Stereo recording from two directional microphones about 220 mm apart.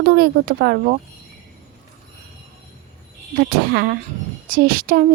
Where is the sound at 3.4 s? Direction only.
45° right (ahead or behind).